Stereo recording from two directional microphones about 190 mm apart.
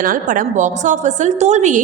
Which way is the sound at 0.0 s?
45° right (ahead or behind).